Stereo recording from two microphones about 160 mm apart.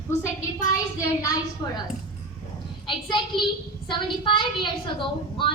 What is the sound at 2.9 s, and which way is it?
A woman's voice, 30° left (ahead or behind).